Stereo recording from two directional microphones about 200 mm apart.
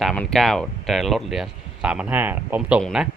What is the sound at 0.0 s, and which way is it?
Speech, centre (ahead or behind).